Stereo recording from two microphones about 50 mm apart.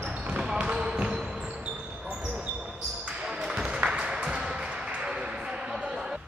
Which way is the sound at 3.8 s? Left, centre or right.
Centre.